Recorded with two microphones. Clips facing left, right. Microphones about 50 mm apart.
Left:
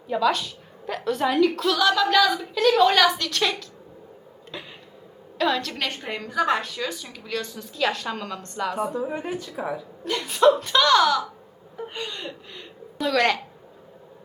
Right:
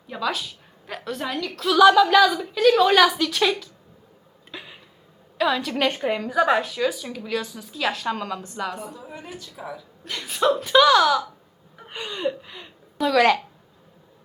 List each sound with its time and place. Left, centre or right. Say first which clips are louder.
0.1 s a woman's voice: left 5 dB; centre
1.6 s a woman's voice: right 6 dB; centre
4.5 s a sound: left 1 dB; centre
5.4 s a woman's voice: right 3 dB; centre
8.9 s speech: left 10 dB; left
10.0 s a woman's voice: left 4 dB; centre